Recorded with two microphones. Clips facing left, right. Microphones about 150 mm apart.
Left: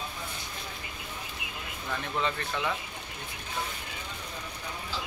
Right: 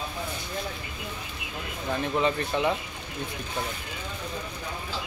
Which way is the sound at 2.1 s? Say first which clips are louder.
Right 5 dB; 15° right (ahead or behind).